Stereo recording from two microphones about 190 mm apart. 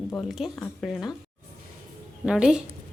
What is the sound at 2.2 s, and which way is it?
Speech, 5° right (ahead or behind).